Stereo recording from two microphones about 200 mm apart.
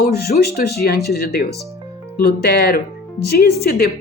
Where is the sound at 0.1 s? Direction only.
50° left (ahead or behind).